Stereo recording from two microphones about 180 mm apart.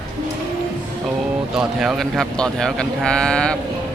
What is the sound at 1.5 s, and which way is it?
Speech, centre (ahead or behind).